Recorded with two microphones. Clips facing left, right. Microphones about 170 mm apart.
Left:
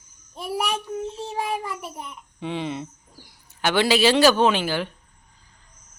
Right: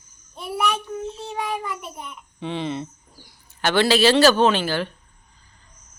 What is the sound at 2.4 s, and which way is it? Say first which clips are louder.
Speech: right 1 dB; 10° left (ahead or behind).